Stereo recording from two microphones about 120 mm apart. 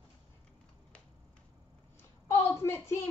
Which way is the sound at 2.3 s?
20° left (ahead or behind).